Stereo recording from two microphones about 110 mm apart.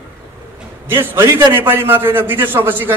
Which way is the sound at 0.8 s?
20° right (ahead or behind).